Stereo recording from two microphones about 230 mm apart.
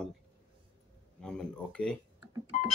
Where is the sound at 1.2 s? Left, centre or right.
Centre.